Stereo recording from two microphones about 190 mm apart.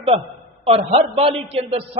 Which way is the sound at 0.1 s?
35° right (ahead or behind).